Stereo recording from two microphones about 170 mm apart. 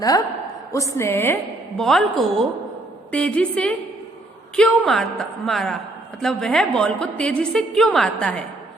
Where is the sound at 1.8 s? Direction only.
Centre (ahead or behind).